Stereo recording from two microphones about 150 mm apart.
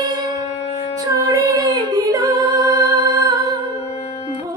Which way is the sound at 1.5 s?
25° right (ahead or behind).